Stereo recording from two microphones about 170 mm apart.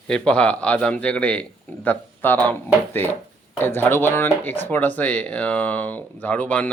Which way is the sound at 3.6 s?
10° left (ahead or behind).